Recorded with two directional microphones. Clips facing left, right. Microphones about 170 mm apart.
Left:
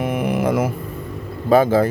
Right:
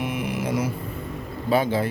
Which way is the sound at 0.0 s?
55° left (ahead or behind).